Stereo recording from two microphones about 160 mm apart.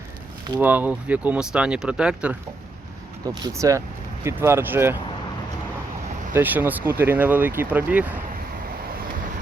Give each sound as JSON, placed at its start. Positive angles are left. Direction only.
{"t": 0.6, "sound": "speech", "side_deg": -10}
{"t": 3.2, "sound": "speech", "side_deg": -20}
{"t": 6.3, "sound": "speech", "side_deg": -10}